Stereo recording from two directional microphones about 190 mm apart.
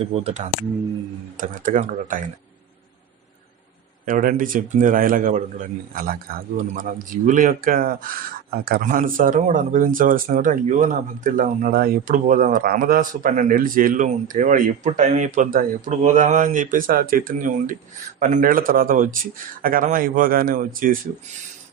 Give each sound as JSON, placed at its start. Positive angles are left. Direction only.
{"t": 0.0, "sound": "speech", "side_deg": -30}
{"t": 1.4, "sound": "a man's voice", "side_deg": -45}
{"t": 4.0, "sound": "a man's voice", "side_deg": -45}